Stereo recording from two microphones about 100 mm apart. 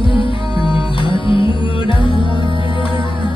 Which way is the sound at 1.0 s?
55° left (ahead or behind).